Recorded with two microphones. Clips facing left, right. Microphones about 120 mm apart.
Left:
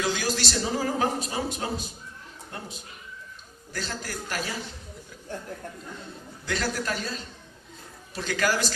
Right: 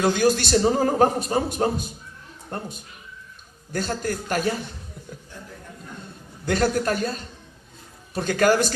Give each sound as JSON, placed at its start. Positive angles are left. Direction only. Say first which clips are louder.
{"t": 0.0, "sound": "a man's voice", "louder": "right 8 dB", "side_deg": -50}
{"t": 6.4, "sound": "a man's voice", "louder": "right 8 dB", "side_deg": -50}